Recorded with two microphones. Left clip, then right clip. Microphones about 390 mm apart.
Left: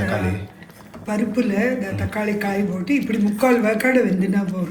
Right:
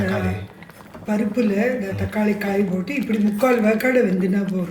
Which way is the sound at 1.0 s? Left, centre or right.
Centre.